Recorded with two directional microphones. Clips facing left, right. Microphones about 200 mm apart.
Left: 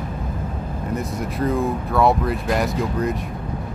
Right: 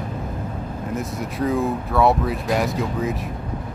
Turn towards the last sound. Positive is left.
turn(degrees=0)  # may be behind; listen again after turning